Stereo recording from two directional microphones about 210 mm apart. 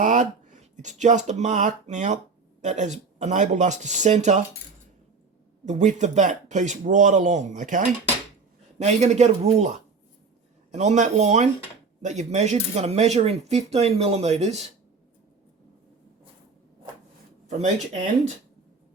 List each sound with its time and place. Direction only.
0.0 s speech: 35° right (ahead or behind)
5.6 s speech: 35° right (ahead or behind)